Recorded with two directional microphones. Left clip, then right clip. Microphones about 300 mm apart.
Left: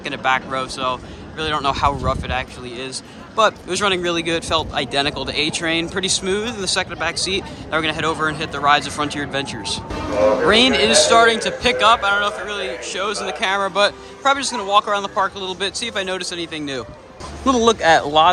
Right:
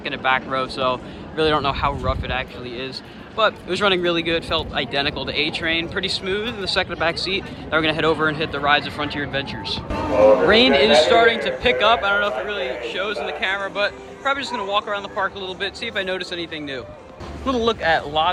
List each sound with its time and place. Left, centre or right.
0.0 s a man's voice: centre
10.5 s a man's voice: centre